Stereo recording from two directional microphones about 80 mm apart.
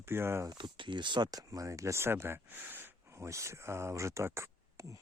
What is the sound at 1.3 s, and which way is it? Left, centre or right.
Speech, right.